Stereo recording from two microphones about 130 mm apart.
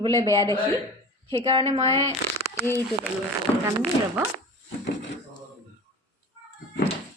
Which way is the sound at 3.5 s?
25° left (ahead or behind).